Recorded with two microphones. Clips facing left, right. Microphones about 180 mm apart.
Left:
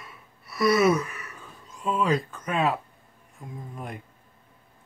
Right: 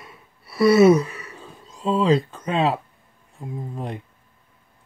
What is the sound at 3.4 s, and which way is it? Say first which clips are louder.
Speech: right 7 dB; 30° right (ahead or behind).